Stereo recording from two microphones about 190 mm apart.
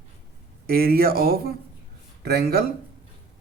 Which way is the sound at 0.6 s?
50° right (ahead or behind).